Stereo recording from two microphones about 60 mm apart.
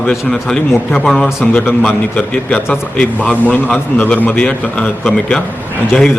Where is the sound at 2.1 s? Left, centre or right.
Left.